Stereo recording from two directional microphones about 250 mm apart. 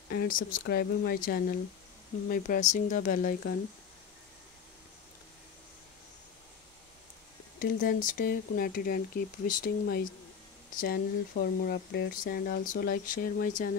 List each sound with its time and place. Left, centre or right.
0.1 s speech: left
7.5 s speech: left